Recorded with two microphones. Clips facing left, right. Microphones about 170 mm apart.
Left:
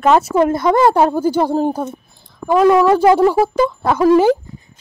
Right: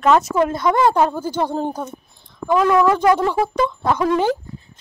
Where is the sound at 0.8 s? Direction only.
10° left (ahead or behind).